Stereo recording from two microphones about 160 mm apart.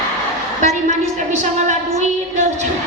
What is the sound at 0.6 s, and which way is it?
A woman's voice, 45° right (ahead or behind).